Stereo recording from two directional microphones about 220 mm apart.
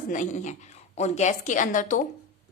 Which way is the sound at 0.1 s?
35° left (ahead or behind).